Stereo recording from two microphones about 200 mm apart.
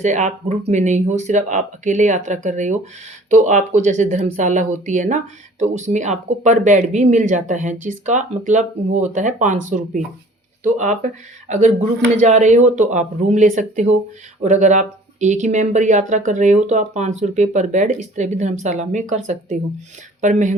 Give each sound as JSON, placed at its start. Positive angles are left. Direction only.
{"t": 0.0, "sound": "speech", "side_deg": -35}